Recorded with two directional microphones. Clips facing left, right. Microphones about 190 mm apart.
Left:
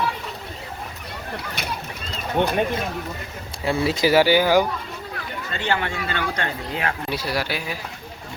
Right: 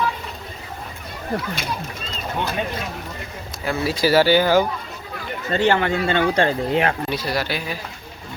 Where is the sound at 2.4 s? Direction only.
65° left (ahead or behind).